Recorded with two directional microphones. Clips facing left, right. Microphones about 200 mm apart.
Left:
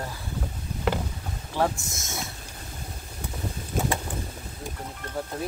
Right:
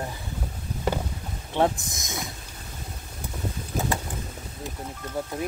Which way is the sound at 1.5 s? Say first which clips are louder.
Right 3 dB; 20° right (ahead or behind).